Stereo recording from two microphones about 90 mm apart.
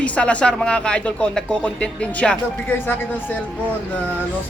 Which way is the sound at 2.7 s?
25° left (ahead or behind).